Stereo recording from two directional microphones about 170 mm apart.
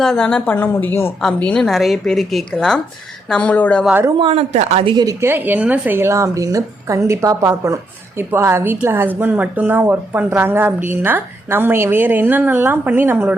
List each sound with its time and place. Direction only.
0.0 s a woman's voice: 5° left (ahead or behind)
4.2 s a woman's voice: 35° right (ahead or behind)
4.9 s speech: 15° right (ahead or behind)